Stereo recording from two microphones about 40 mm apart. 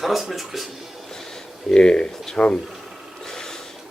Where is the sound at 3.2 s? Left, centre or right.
Centre.